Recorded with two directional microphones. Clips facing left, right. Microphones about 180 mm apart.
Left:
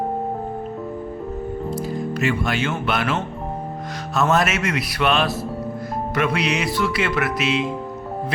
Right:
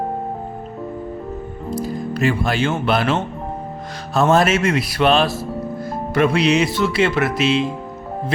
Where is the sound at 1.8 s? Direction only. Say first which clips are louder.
Right 5 dB; 35° right (ahead or behind).